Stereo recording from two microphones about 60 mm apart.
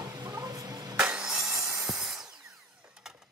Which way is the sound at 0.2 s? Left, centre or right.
Right.